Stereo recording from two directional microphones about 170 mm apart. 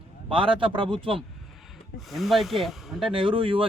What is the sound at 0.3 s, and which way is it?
Speech, 30° right (ahead or behind).